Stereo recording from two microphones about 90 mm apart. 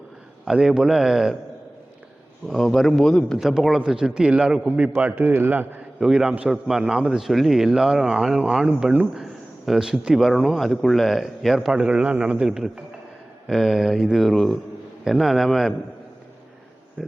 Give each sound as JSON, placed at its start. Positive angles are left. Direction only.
{"t": 0.4, "sound": "speech", "side_deg": -5}
{"t": 2.5, "sound": "speech", "side_deg": 0}
{"t": 3.3, "sound": "a man's voice", "side_deg": -5}
{"t": 6.0, "sound": "a man's voice", "side_deg": -5}
{"t": 17.0, "sound": "speech", "side_deg": 5}